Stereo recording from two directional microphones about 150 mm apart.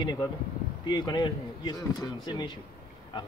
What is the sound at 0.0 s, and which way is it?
Speech, 30° left (ahead or behind).